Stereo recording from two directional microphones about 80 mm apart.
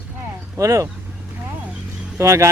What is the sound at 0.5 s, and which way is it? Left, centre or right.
Speech, right.